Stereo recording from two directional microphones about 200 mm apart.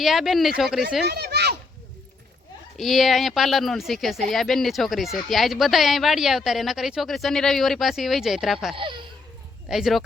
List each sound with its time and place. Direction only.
0.0 s speech: centre (ahead or behind)
1.0 s a sound: 55° right (ahead or behind)
2.7 s speech: centre (ahead or behind)
8.7 s speech: 25° right (ahead or behind)
9.6 s speech: centre (ahead or behind)